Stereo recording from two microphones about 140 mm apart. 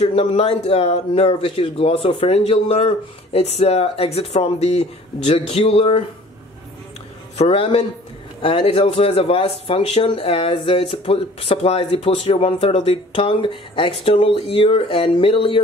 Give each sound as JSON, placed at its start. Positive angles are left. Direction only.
{"t": 0.0, "sound": "speech", "side_deg": 45}
{"t": 7.3, "sound": "speech", "side_deg": 45}